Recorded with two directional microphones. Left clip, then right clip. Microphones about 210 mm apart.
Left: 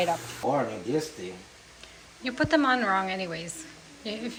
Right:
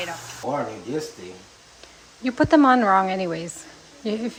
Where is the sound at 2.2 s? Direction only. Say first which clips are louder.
Right 7 dB; 30° right (ahead or behind).